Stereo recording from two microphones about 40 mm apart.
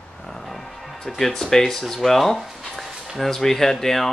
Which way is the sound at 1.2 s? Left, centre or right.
Centre.